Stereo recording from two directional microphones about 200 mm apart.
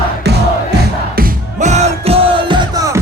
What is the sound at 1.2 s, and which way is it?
Music, 40° right (ahead or behind).